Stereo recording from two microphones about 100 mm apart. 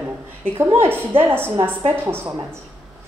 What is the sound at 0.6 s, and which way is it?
Speech, 25° right (ahead or behind).